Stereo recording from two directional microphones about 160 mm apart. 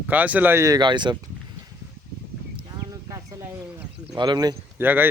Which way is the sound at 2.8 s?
20° right (ahead or behind).